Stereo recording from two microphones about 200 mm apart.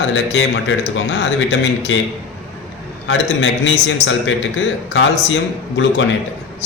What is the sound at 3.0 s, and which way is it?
A man's voice, 65° left (ahead or behind).